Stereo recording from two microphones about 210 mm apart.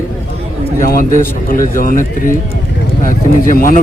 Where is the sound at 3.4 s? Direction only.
40° left (ahead or behind).